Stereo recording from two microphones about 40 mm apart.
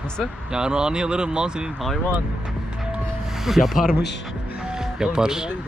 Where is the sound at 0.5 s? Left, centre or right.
Centre.